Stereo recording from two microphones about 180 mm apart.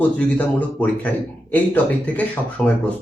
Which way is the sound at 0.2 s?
5° left (ahead or behind).